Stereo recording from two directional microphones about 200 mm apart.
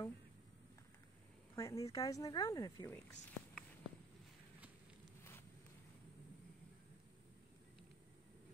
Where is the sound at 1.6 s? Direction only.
15° left (ahead or behind).